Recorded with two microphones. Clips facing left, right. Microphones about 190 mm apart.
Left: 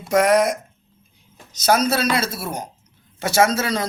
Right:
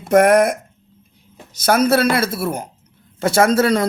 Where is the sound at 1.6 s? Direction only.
55° right (ahead or behind).